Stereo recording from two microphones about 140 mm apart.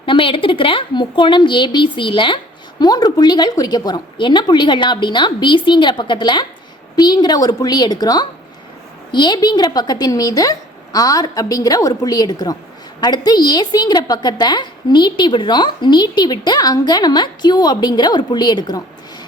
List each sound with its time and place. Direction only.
0.0 s a woman's voice: 40° left (ahead or behind)